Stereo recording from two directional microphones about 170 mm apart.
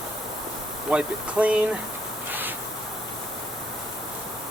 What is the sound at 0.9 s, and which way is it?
Speech, 5° right (ahead or behind).